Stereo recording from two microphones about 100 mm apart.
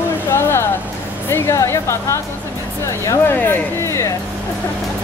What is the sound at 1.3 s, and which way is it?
Speech, 30° left (ahead or behind).